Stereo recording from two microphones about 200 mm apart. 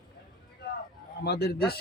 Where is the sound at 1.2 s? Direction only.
55° left (ahead or behind).